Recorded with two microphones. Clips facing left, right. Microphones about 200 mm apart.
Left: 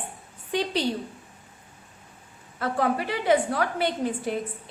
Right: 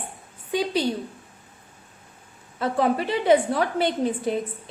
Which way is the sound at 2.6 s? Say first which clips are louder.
Right 3 dB; 25° right (ahead or behind).